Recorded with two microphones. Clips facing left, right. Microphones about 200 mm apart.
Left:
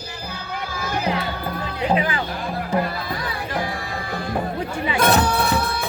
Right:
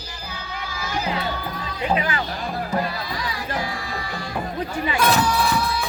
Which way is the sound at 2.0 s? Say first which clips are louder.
Left 2 dB; 25° left (ahead or behind).